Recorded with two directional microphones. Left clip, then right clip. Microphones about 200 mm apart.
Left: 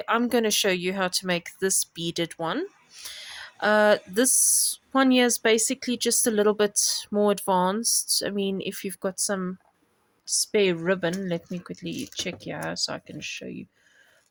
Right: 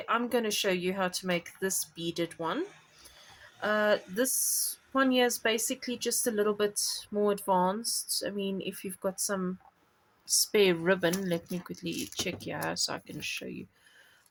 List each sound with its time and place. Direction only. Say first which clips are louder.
0.0 s a woman's voice: left 6 dB; 45° left (ahead or behind)
10.2 s speech: left 2 dB; 25° left (ahead or behind)